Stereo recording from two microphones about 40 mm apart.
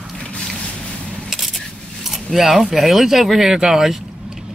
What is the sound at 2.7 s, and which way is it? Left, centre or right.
Speech, centre.